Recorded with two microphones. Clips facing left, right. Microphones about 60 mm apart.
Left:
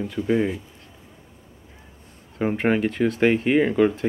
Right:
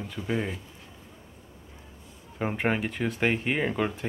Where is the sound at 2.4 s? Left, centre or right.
Centre.